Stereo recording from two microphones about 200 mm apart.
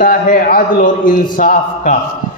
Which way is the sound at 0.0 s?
45° left (ahead or behind).